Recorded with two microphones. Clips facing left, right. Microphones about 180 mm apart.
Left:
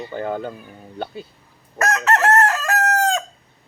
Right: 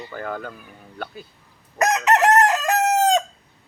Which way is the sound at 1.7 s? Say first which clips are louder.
Right 1 dB; 15° right (ahead or behind).